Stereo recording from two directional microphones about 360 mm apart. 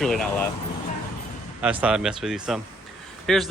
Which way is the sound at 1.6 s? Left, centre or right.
Centre.